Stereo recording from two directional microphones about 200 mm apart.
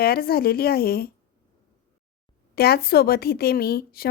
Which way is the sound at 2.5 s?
50° left (ahead or behind).